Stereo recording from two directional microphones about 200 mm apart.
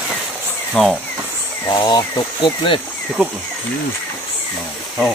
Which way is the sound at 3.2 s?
5° right (ahead or behind).